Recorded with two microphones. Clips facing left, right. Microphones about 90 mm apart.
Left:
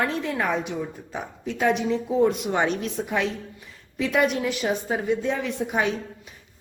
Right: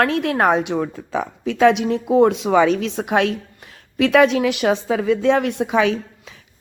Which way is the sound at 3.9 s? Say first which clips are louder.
Right 8 dB; 85° right.